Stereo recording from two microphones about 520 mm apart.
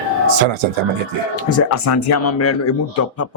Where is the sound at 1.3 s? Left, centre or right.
Left.